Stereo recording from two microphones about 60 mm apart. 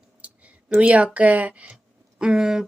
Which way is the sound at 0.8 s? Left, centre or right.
Right.